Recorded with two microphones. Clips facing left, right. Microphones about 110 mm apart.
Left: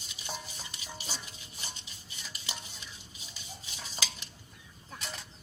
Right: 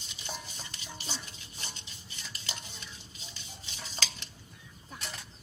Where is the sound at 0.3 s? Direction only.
10° left (ahead or behind).